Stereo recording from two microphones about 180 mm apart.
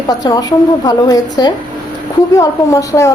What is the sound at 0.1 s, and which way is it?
A woman's voice, 20° left (ahead or behind).